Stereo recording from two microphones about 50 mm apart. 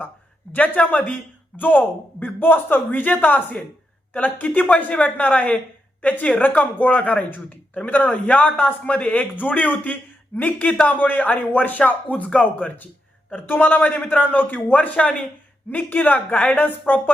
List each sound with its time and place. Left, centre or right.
0.5 s a man's voice: left
7.3 s a man's voice: left
13.3 s a man's voice: left
15.7 s a man's voice: left